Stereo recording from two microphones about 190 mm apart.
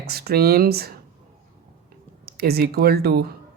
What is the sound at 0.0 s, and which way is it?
Speech, 55° right (ahead or behind).